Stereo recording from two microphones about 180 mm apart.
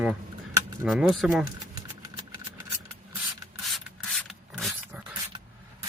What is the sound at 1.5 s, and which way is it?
Engine, 20° right (ahead or behind).